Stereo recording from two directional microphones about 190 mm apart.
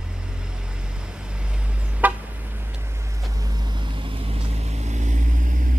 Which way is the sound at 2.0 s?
10° right (ahead or behind).